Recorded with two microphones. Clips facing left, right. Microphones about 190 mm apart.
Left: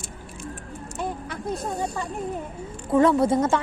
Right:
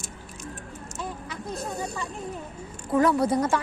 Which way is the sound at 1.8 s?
45° left (ahead or behind).